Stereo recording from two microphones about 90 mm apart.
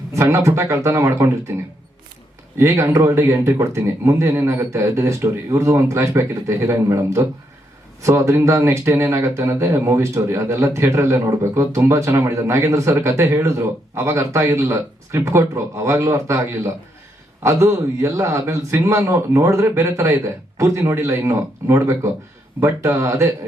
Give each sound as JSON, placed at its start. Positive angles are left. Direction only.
{"t": 0.1, "sound": "speech", "side_deg": -35}
{"t": 2.6, "sound": "speech", "side_deg": -30}